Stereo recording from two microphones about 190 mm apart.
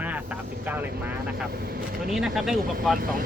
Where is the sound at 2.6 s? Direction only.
50° right (ahead or behind).